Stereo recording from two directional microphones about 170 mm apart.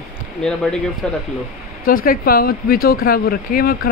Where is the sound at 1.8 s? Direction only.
60° left (ahead or behind).